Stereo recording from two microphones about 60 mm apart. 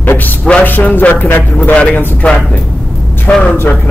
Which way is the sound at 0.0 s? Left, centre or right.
Left.